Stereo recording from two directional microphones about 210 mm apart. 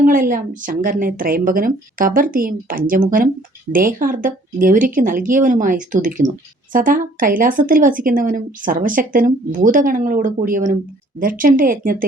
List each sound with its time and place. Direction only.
0.0 s speech: 40° right (ahead or behind)